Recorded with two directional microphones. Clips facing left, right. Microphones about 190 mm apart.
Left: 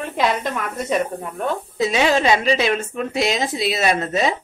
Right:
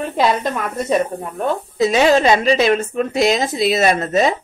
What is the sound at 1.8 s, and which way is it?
A woman's voice, 40° right (ahead or behind).